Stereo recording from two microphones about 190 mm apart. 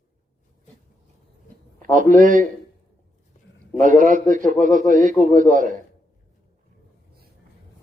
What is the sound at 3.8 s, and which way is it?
Speech, 45° right (ahead or behind).